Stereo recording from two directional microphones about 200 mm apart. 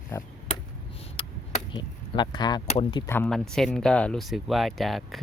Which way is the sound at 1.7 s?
25° left (ahead or behind).